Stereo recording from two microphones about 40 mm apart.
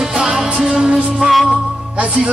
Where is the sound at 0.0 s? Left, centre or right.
Centre.